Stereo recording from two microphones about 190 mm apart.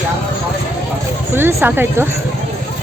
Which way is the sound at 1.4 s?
10° right (ahead or behind).